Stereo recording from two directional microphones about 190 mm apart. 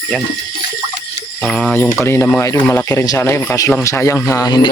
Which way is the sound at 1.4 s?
5° left (ahead or behind).